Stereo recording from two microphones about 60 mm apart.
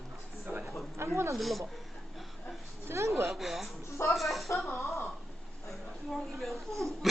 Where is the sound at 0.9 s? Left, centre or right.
Right.